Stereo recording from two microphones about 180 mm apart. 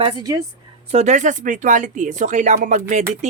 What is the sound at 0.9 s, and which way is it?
Speech, 40° right (ahead or behind).